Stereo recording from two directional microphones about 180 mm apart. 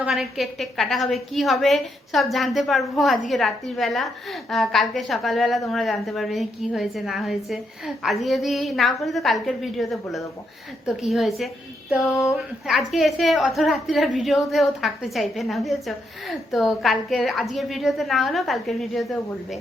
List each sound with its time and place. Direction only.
0.0 s a woman's voice: centre (ahead or behind)